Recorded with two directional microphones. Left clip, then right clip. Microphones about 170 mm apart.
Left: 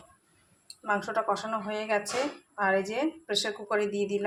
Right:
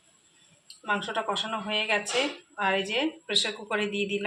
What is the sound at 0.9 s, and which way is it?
A woman's voice, 5° left (ahead or behind).